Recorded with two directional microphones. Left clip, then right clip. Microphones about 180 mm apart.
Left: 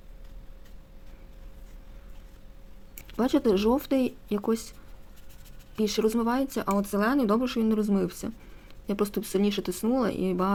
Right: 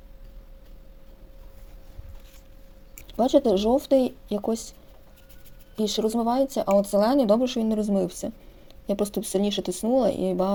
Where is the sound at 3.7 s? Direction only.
10° left (ahead or behind).